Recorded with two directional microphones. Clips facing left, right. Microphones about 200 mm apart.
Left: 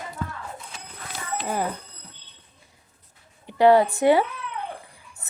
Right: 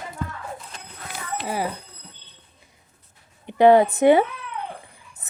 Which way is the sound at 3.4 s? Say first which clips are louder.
Right 2 dB; 20° right (ahead or behind).